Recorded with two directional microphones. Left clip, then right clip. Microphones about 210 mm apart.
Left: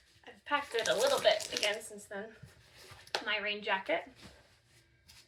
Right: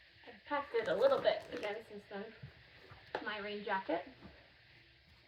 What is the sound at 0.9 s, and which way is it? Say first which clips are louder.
Speech: left 3 dB; 20° left (ahead or behind).